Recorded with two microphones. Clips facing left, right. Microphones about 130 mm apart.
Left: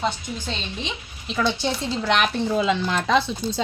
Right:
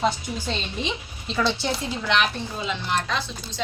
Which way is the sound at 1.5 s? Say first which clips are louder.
Left 1 dB; 15° left (ahead or behind).